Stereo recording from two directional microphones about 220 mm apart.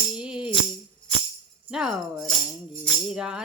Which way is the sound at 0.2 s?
5° right (ahead or behind).